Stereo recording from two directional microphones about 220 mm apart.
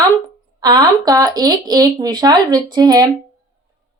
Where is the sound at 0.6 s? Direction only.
20° right (ahead or behind).